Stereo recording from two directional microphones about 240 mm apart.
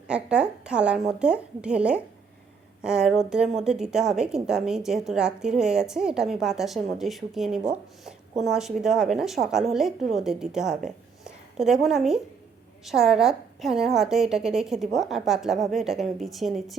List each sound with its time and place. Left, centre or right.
0.1 s speech: centre
10.8 s a sound: centre
12.8 s speech: centre